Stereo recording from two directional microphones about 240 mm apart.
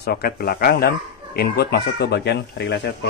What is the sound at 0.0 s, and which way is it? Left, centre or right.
Speech, left.